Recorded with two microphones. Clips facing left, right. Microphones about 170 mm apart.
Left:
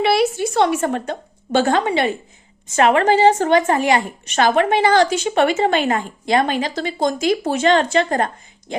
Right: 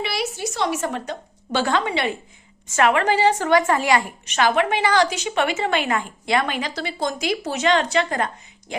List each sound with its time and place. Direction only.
0.0 s a sound: 55° left (ahead or behind)
2.7 s a woman's voice: 35° left (ahead or behind)
4.4 s a woman's voice: 35° left (ahead or behind)
5.1 s a woman's voice: 45° left (ahead or behind)